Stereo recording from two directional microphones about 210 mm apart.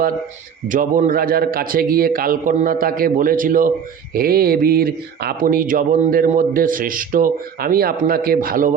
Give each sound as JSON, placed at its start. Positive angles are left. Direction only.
{"t": 0.7, "sound": "speech", "side_deg": -40}